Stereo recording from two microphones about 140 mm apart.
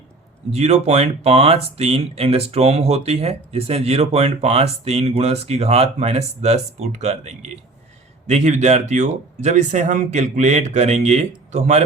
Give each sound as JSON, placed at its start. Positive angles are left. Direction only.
{"t": 0.5, "sound": "speech", "side_deg": -50}